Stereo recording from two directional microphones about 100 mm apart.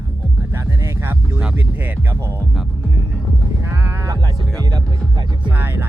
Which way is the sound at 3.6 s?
25° right (ahead or behind).